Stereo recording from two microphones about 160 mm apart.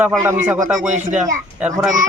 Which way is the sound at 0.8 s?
50° right (ahead or behind).